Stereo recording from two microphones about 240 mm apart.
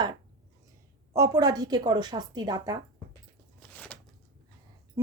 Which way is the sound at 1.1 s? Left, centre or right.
Centre.